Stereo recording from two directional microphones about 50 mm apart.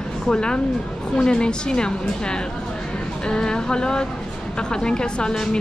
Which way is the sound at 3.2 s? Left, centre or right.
Centre.